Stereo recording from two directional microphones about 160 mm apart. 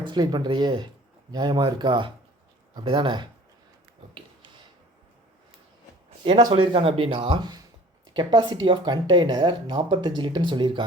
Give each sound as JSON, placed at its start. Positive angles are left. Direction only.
{"t": 0.0, "sound": "speech", "side_deg": -30}
{"t": 6.5, "sound": "speech", "side_deg": -35}